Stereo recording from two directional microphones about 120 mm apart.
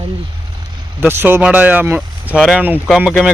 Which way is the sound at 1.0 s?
15° right (ahead or behind).